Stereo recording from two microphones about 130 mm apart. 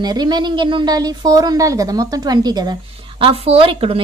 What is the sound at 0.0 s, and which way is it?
A woman's voice, 30° right (ahead or behind).